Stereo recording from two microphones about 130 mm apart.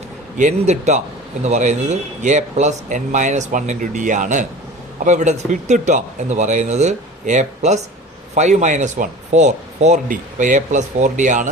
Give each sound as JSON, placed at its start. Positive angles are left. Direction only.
{"t": 0.3, "sound": "a man's voice", "side_deg": -65}